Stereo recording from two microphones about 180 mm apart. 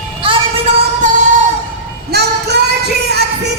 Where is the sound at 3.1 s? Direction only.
65° right (ahead or behind).